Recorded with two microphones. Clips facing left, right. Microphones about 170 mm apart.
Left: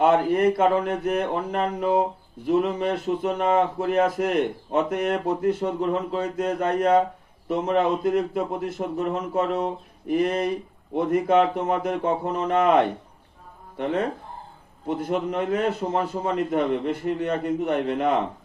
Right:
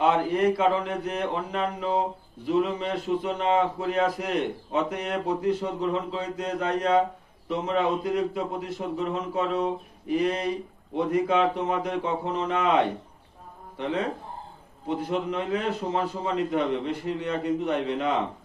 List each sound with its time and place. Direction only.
0.0 s speech: 45° left (ahead or behind)